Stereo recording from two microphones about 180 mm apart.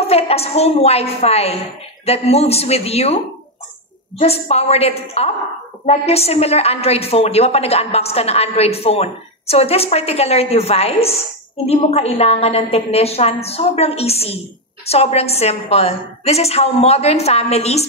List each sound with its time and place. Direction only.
0.0 s a woman's voice: 35° left (ahead or behind)
4.2 s a woman's voice: 35° left (ahead or behind)